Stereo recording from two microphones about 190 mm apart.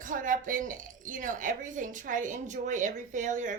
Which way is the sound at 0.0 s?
45° right (ahead or behind).